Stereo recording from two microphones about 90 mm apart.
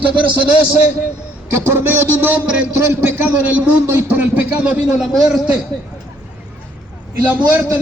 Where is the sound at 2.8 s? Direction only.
25° right (ahead or behind); by 5.5 s 5° right (ahead or behind).